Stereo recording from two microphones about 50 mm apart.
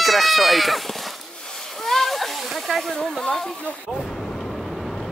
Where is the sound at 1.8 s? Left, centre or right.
Centre.